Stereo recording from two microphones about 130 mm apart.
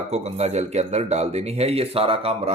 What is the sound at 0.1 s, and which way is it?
Speech, 55° right (ahead or behind).